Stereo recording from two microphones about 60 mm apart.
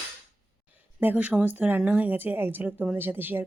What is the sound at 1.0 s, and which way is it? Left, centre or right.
A woman's voice, right.